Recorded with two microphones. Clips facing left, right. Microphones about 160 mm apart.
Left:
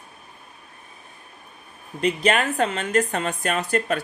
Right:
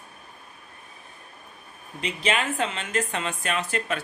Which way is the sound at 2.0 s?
45° left (ahead or behind).